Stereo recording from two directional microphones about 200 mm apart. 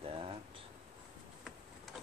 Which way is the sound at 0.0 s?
30° right (ahead or behind).